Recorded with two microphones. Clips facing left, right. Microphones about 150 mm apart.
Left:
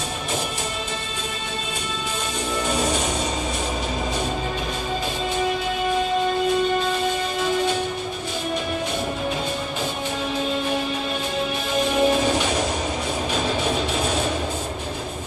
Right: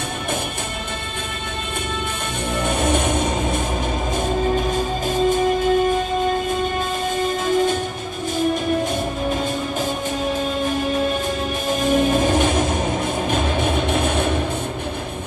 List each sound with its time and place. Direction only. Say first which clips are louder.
2.5 s music: right 3 dB; 55° right (ahead or behind)
4.6 s music: right 5 dB; 45° right (ahead or behind)
7.4 s music: right 3 dB; 45° right (ahead or behind)
11.7 s music: right 2 dB; 45° right (ahead or behind)